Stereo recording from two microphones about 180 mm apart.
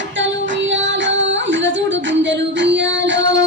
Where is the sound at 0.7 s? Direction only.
90° right.